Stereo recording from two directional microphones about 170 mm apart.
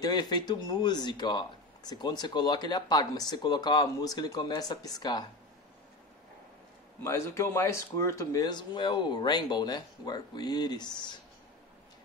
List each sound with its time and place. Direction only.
0.0 s speech: 25° left (ahead or behind)
7.0 s speech: 15° left (ahead or behind)